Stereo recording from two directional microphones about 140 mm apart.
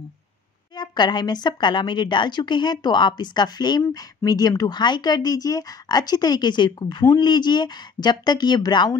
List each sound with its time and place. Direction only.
0.7 s a woman's voice: 30° left (ahead or behind)